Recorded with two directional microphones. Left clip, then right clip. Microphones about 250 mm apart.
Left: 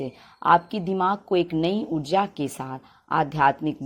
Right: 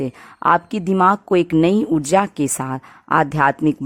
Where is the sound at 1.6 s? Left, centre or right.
Right.